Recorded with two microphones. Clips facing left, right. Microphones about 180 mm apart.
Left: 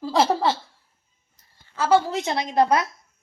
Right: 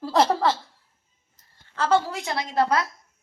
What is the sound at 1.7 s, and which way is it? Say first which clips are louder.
Speech: left 2 dB; 5° left (ahead or behind).